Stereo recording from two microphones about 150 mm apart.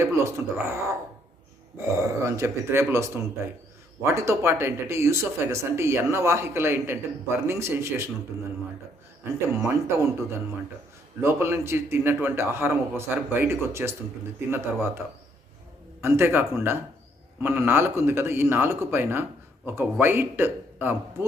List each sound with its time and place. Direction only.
0.0 s speech: 20° right (ahead or behind)
9.5 s speech: 20° right (ahead or behind)